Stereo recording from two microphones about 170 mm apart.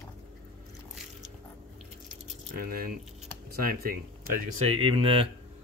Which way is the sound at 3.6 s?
60° right (ahead or behind).